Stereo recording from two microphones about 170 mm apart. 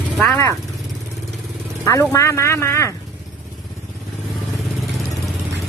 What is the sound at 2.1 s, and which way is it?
Speech, 15° left (ahead or behind).